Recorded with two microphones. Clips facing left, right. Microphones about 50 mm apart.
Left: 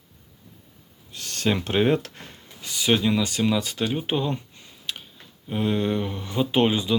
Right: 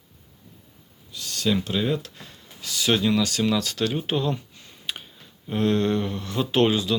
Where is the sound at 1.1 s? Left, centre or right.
Left.